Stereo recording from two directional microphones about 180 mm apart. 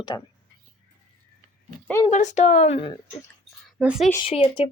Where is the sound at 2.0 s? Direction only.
40° left (ahead or behind).